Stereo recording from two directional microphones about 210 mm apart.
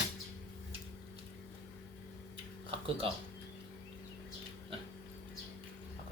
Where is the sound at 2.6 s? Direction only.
25° right (ahead or behind).